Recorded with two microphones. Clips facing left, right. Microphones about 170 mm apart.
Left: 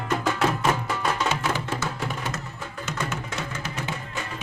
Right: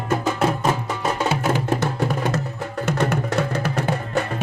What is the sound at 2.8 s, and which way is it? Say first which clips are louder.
Music: right 10 dB; 65° right (ahead or behind).